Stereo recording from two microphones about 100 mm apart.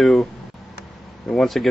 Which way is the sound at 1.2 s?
Centre (ahead or behind).